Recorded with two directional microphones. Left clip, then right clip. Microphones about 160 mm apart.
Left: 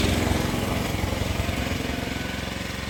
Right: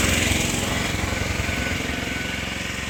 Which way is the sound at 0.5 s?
Centre (ahead or behind).